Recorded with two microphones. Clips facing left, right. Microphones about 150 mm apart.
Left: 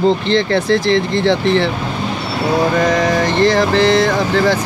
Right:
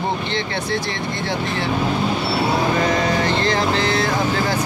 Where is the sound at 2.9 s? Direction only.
90° left.